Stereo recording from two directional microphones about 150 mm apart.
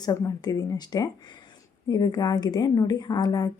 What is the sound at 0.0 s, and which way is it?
A woman's voice, 25° left (ahead or behind).